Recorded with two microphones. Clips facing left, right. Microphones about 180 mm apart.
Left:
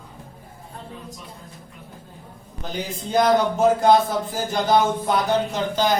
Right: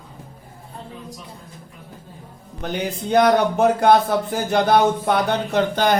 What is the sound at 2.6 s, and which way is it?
Speech, 65° right (ahead or behind).